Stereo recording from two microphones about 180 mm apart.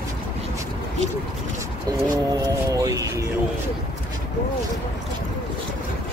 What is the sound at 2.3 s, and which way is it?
Speech, 20° right (ahead or behind).